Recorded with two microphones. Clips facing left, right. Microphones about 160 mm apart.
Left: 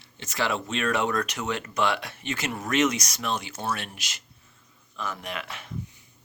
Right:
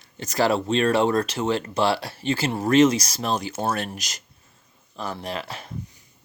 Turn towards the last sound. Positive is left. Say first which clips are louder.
# right 4 dB
turn(degrees=-35)  # may be behind; listen again after turning